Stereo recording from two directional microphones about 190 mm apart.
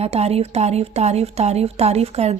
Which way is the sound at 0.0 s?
35° right (ahead or behind).